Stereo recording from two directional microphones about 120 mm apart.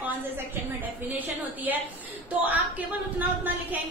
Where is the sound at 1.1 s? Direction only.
15° right (ahead or behind).